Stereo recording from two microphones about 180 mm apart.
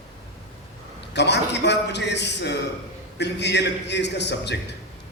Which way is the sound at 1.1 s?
70° left (ahead or behind).